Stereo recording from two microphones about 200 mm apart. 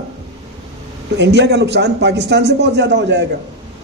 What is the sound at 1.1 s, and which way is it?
A man's voice, 60° right (ahead or behind).